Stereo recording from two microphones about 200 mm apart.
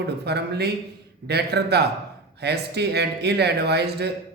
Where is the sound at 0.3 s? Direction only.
55° right (ahead or behind).